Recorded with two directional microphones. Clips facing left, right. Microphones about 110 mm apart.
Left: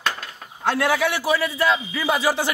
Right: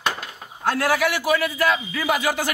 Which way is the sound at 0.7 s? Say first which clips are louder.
Even; 25° left (ahead or behind).